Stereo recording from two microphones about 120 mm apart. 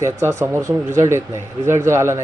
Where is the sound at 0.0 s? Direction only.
20° right (ahead or behind).